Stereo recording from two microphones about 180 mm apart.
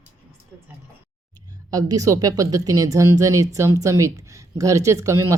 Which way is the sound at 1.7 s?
20° right (ahead or behind).